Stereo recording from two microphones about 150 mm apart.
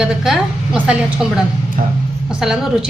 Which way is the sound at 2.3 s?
5° right (ahead or behind).